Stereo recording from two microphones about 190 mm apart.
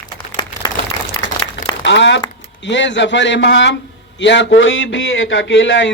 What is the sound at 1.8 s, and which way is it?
Crumpling, 70° left (ahead or behind).